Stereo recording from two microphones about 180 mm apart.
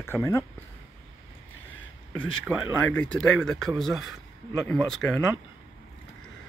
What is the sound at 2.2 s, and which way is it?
Speech, 5° left (ahead or behind).